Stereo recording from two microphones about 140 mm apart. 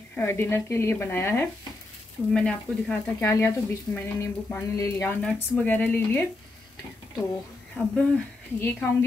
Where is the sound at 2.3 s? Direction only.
5° left (ahead or behind).